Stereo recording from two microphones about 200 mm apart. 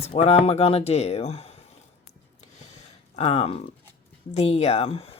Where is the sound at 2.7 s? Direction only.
30° left (ahead or behind).